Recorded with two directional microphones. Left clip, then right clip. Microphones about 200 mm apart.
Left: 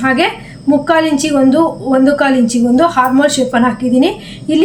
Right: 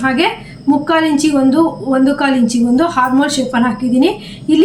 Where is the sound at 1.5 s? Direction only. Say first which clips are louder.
Left 2 dB; 15° left (ahead or behind).